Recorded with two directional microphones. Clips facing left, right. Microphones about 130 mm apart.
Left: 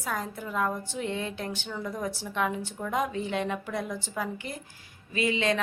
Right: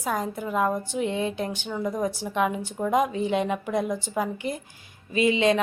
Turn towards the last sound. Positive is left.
turn(degrees=-20)  # may be behind; listen again after turning